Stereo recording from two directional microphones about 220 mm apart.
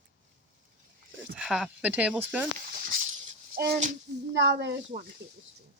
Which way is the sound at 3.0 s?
40° right (ahead or behind).